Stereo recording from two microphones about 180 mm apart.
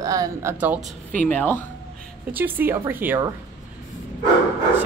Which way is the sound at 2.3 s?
10° right (ahead or behind).